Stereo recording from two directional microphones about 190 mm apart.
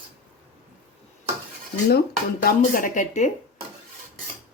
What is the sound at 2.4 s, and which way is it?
Speech, 45° left (ahead or behind).